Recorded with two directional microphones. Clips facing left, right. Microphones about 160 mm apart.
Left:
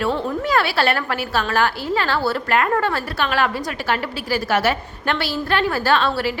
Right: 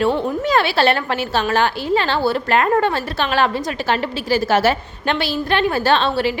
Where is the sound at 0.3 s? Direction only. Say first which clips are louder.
Right 2 dB; 20° right (ahead or behind).